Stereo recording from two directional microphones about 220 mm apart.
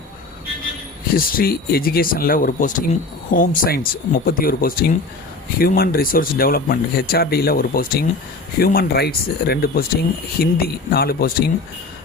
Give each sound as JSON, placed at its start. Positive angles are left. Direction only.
{"t": 1.1, "sound": "speech", "side_deg": 40}